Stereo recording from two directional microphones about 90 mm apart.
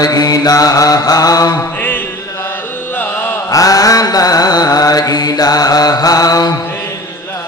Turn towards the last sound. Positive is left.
turn(degrees=45)  # may be behind; listen again after turning